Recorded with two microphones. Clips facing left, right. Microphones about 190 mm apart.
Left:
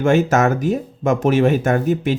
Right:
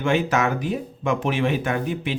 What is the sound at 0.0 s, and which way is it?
Speech, 45° left (ahead or behind).